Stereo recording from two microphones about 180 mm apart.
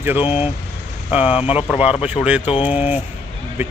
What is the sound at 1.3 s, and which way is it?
Speech, 35° left (ahead or behind).